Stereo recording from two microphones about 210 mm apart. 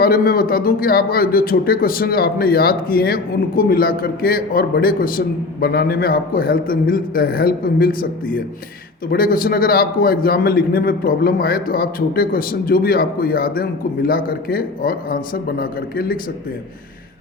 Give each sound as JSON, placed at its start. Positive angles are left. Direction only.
{"t": 0.0, "sound": "speech", "side_deg": 45}